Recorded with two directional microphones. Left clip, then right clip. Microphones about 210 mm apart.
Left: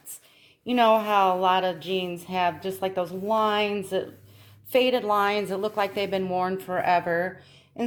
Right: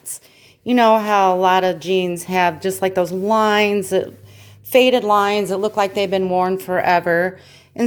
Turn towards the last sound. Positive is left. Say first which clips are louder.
# right 8 dB
turn(degrees=-40)  # may be behind; listen again after turning